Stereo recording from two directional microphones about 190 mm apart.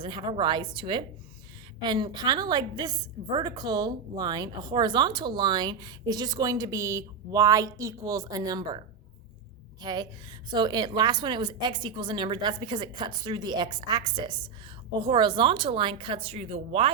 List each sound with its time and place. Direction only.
0.0 s a woman's voice: 25° right (ahead or behind)
9.8 s a woman's voice: 20° right (ahead or behind)